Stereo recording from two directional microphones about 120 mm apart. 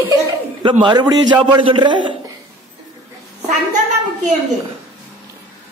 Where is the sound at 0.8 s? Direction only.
35° right (ahead or behind).